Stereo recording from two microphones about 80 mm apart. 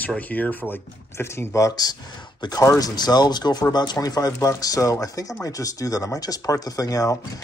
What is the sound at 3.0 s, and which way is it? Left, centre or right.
Speech, left.